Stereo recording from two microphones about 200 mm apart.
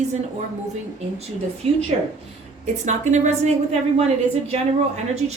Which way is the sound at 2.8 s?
35° right (ahead or behind).